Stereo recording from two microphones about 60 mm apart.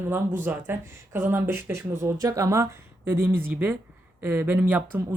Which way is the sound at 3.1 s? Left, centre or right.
Right.